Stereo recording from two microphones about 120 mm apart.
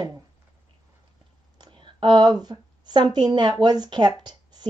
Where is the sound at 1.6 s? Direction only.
40° right (ahead or behind).